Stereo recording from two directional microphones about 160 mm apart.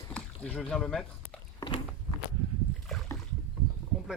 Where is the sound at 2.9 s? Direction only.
Centre (ahead or behind).